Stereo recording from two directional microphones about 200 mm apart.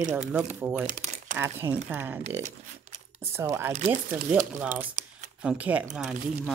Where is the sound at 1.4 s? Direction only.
10° right (ahead or behind).